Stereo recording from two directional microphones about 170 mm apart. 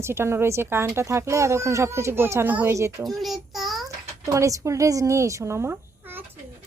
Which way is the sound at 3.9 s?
20° right (ahead or behind).